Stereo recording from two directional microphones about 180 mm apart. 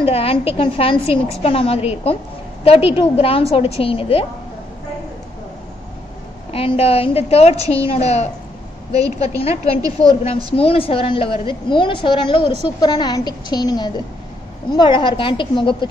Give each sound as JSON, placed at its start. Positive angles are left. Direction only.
{"t": 0.0, "sound": "a woman's voice", "side_deg": 30}
{"t": 6.5, "sound": "a woman's voice", "side_deg": 30}
{"t": 9.4, "sound": "a woman's voice", "side_deg": 35}
{"t": 9.8, "sound": "a woman's voice", "side_deg": -20}
{"t": 10.5, "sound": "a woman's voice", "side_deg": 30}